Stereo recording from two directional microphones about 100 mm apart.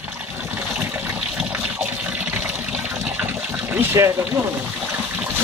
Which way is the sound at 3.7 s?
25° right (ahead or behind).